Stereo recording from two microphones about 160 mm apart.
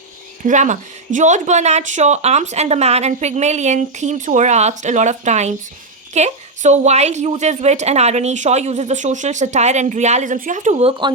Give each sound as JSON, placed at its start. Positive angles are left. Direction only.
{"t": 0.4, "sound": "speech", "side_deg": -50}